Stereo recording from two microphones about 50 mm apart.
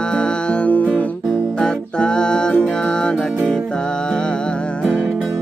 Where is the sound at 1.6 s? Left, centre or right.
Centre.